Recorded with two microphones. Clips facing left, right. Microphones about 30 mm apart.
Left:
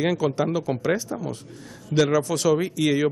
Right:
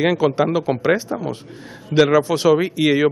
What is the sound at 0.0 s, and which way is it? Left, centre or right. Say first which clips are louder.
Speech: right 6 dB; right.